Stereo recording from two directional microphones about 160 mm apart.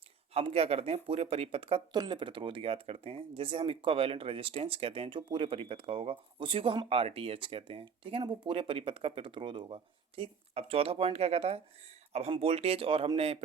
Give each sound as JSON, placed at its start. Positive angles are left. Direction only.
{"t": 0.3, "sound": "speech", "side_deg": -40}